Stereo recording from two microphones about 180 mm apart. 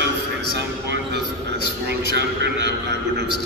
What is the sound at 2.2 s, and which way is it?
Speech, 75° right (ahead or behind).